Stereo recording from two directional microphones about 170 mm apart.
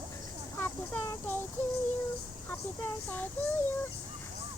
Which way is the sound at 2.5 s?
10° left (ahead or behind).